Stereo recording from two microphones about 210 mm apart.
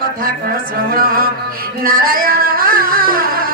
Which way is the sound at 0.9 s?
45° right (ahead or behind).